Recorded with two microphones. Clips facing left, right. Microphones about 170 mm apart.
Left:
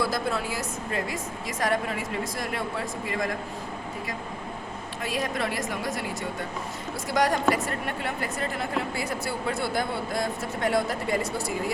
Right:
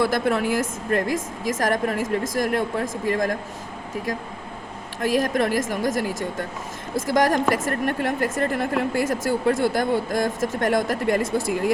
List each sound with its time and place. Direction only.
0.3 s a woman's voice: 55° right (ahead or behind)
5.1 s a woman's voice: 45° right (ahead or behind)
7.1 s a woman's voice: 45° right (ahead or behind)